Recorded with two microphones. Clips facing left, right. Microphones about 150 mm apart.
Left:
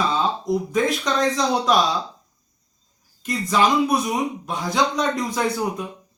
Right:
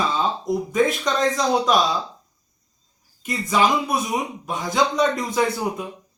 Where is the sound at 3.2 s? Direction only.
5° right (ahead or behind).